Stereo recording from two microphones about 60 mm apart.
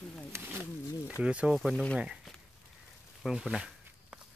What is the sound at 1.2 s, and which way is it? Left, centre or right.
Speech, centre.